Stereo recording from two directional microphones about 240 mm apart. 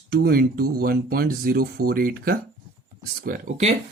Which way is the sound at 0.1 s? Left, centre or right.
Right.